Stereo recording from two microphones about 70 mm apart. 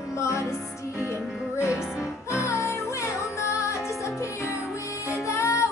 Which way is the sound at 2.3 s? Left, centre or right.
Left.